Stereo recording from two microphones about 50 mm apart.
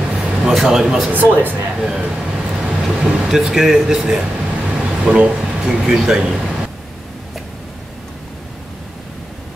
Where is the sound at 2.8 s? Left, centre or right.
Centre.